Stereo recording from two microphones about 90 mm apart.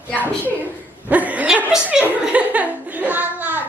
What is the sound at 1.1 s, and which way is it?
Chuckle, 15° right (ahead or behind).